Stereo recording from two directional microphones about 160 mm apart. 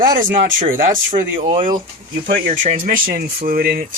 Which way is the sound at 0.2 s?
55° right (ahead or behind).